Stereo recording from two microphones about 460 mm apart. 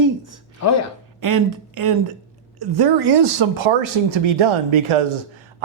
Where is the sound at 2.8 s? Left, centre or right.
Right.